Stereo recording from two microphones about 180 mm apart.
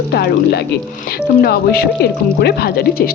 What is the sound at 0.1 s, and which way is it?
Speech, 65° left (ahead or behind).